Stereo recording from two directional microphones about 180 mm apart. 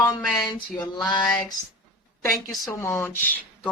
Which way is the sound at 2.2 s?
20° left (ahead or behind).